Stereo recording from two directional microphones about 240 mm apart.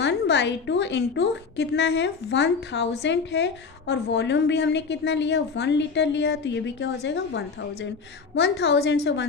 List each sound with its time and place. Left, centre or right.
0.0 s a woman's voice: left